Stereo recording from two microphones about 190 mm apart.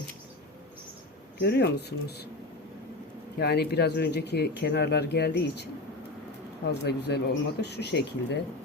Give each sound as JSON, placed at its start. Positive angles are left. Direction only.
{"t": 1.4, "sound": "speech", "side_deg": 60}
{"t": 3.3, "sound": "speech", "side_deg": 60}
{"t": 6.7, "sound": "speech", "side_deg": 60}